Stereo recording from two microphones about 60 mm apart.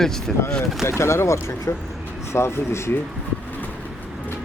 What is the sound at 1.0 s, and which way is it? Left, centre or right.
Speech, left.